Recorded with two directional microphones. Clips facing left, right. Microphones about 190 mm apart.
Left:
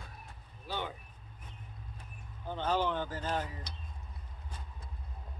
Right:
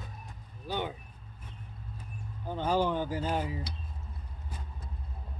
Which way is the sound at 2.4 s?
10° right (ahead or behind).